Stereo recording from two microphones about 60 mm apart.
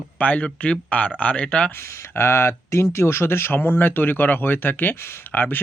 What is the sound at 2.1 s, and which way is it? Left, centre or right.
Speech, left.